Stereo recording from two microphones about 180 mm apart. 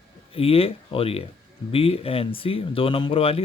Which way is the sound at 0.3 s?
30° left (ahead or behind).